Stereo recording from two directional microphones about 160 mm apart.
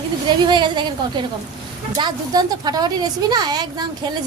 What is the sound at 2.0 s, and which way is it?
A woman's voice, 25° right (ahead or behind).